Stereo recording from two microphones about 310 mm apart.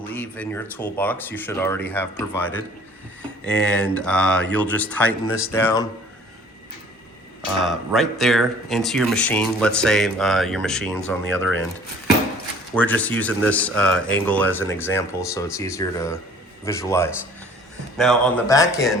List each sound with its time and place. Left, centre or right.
0.1 s speech: centre
7.7 s speech: centre
12.7 s speech: centre